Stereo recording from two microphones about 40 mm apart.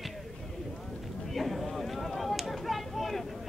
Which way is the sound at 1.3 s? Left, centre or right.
Centre.